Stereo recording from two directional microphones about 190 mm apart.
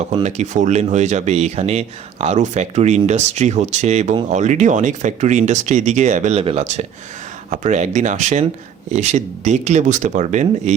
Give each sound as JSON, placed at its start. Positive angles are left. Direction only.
{"t": 0.0, "sound": "speech", "side_deg": -40}